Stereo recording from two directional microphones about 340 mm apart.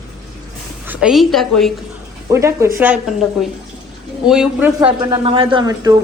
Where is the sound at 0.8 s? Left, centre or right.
Centre.